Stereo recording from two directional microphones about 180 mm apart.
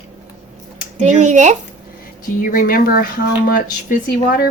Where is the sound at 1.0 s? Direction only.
40° right (ahead or behind).